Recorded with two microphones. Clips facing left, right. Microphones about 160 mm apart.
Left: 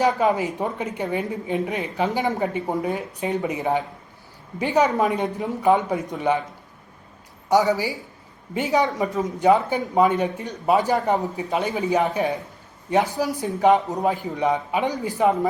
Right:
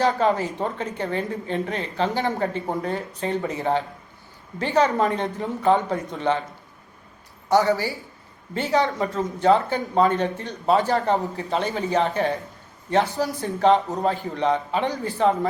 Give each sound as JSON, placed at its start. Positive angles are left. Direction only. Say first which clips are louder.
{"t": 0.0, "sound": "speech", "louder": "left 1 dB", "side_deg": 10}
{"t": 5.2, "sound": "speech", "louder": "left 2 dB", "side_deg": 0}
{"t": 5.6, "sound": "speech", "louder": "left 1 dB", "side_deg": 15}
{"t": 7.4, "sound": "speech", "louder": "even", "side_deg": 15}